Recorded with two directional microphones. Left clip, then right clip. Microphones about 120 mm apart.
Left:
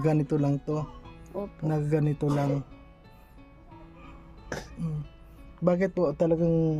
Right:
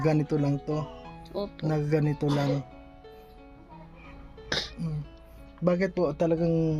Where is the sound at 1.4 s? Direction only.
20° left (ahead or behind).